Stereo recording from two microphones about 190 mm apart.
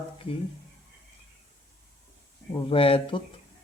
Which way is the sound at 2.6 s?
30° left (ahead or behind).